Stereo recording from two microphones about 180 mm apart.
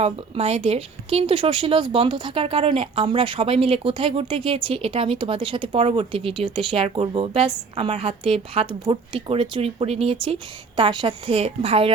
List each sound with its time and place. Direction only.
0.0 s speech: 35° right (ahead or behind)